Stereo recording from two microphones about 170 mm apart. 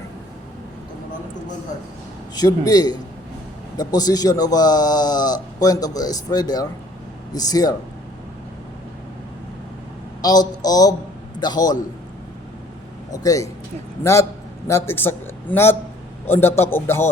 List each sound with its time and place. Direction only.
2.3 s speech: 25° left (ahead or behind)
10.2 s a man's voice: 20° left (ahead or behind)
13.1 s a woman's voice: 20° left (ahead or behind)